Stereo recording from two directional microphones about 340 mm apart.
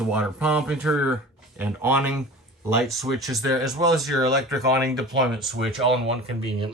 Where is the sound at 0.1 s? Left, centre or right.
Centre.